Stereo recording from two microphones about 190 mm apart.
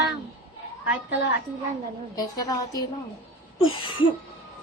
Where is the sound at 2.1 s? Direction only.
20° left (ahead or behind).